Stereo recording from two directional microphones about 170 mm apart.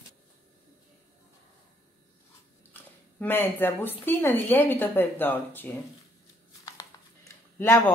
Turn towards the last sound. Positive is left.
turn(degrees=15)  # may be behind; listen again after turning